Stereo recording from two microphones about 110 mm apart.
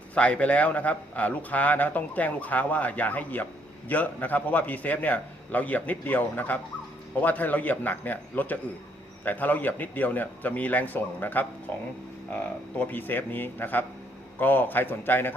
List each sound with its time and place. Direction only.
0.1 s a man's voice: 10° left (ahead or behind)